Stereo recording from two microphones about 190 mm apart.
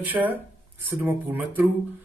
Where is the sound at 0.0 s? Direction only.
10° right (ahead or behind).